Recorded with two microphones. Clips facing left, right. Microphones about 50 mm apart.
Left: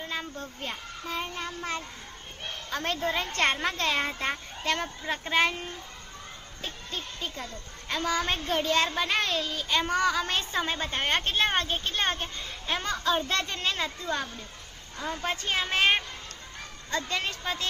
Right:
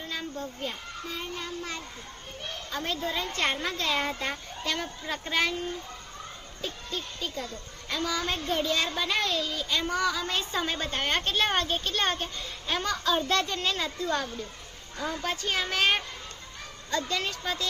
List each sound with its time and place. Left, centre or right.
0.1 s children playing: left
0.6 s a woman's voice: left
2.6 s a woman's voice: left
6.6 s a woman's voice: left
10.6 s a woman's voice: left